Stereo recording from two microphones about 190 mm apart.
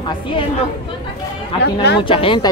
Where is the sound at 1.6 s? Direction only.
60° left (ahead or behind).